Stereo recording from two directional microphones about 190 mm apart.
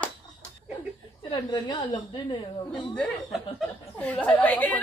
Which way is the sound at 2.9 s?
5° left (ahead or behind).